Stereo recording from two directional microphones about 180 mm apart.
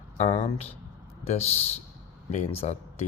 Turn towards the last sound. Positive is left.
turn(degrees=35)  # may be behind; listen again after turning